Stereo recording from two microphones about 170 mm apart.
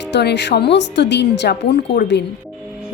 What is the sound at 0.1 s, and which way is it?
A woman's voice, 85° left.